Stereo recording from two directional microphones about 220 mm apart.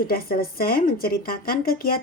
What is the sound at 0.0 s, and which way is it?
A woman's voice, 40° left (ahead or behind).